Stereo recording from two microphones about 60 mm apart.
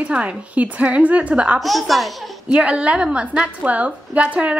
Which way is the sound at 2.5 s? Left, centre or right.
Right.